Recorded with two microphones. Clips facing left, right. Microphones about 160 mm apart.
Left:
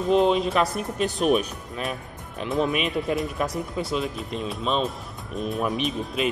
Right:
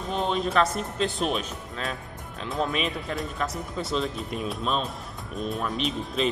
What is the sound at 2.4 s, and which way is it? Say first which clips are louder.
Speech: left 4 dB; 15° left (ahead or behind).